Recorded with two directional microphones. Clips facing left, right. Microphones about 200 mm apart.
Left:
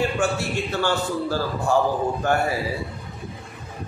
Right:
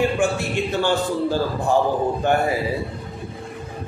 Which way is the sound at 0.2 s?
15° right (ahead or behind).